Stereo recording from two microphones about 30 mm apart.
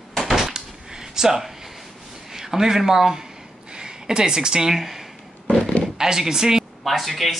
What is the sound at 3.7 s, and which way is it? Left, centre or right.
Speech, right.